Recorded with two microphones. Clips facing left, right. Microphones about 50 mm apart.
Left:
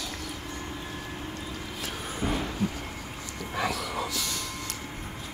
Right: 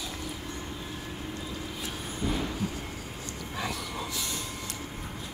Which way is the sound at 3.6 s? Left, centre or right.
Left.